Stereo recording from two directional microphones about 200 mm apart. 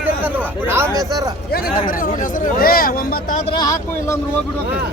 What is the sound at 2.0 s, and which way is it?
Speech, 45° left (ahead or behind).